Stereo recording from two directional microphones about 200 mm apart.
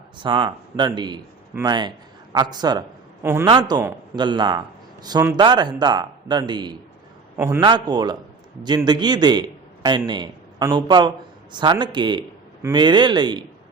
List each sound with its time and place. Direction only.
0.2 s a man's voice: 25° right (ahead or behind)
7.3 s a man's voice: 10° right (ahead or behind)